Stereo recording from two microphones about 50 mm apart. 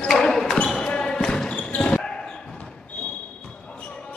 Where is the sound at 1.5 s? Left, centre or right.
Left.